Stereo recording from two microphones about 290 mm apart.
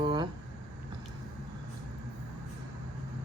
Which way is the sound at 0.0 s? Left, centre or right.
Centre.